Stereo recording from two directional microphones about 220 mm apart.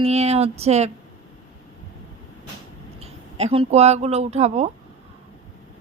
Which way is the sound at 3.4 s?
30° right (ahead or behind).